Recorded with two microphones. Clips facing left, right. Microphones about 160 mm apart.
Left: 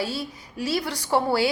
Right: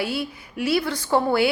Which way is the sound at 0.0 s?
65° right (ahead or behind).